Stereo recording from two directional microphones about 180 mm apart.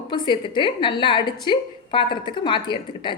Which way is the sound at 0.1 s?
25° left (ahead or behind).